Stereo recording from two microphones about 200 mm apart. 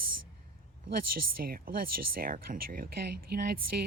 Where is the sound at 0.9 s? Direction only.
45° right (ahead or behind).